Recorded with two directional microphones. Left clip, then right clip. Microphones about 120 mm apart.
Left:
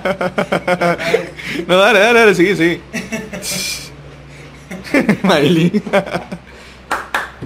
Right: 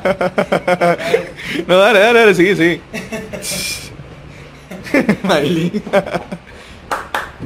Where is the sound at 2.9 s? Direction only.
10° right (ahead or behind).